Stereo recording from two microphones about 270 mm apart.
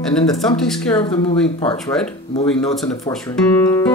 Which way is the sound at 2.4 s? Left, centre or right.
Centre.